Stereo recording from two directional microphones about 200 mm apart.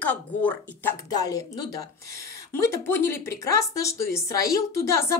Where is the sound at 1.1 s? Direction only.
20° left (ahead or behind).